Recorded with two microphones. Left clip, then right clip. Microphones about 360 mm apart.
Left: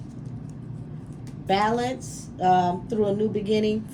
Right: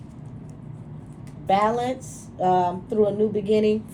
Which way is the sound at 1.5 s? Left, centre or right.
Centre.